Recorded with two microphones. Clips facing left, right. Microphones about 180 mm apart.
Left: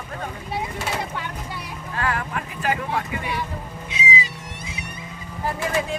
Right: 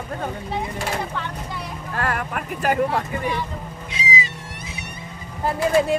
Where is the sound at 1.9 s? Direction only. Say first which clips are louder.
Right 1 dB; 55° right (ahead or behind).